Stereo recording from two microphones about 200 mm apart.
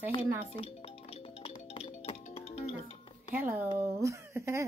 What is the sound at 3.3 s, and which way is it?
Speech, 10° right (ahead or behind).